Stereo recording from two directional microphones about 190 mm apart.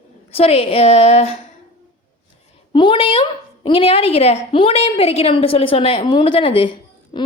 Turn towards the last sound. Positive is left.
turn(degrees=25)  # may be behind; listen again after turning